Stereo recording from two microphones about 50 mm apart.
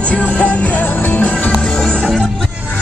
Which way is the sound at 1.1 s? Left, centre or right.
Left.